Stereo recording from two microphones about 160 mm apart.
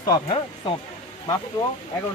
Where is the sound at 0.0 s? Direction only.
25° left (ahead or behind).